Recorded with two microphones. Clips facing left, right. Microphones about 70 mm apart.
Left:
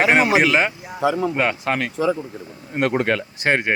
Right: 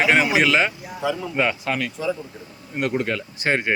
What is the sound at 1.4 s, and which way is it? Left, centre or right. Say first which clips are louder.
Speech: left 2 dB; left.